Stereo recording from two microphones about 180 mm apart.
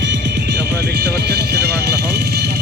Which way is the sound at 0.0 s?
75° right (ahead or behind).